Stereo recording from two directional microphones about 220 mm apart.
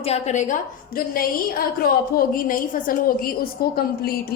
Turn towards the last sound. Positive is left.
turn(degrees=45)  # may be behind; listen again after turning